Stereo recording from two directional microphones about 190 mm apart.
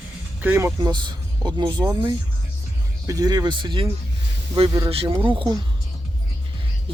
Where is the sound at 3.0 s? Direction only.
20° right (ahead or behind).